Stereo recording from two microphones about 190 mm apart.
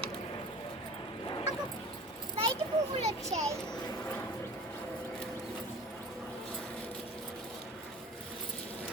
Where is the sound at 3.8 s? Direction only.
10° left (ahead or behind).